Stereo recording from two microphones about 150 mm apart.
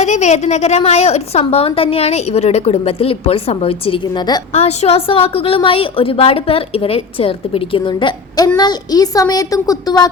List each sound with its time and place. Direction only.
0.0 s a woman's voice: 50° left (ahead or behind); by 4.4 s 30° left (ahead or behind)
4.5 s a woman's voice: 45° left (ahead or behind); by 10.1 s 25° left (ahead or behind)